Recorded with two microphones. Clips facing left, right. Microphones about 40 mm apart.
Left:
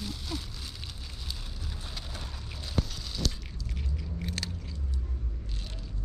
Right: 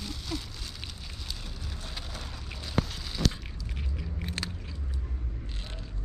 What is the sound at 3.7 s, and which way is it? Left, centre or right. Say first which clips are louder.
Car: left 1 dB; centre.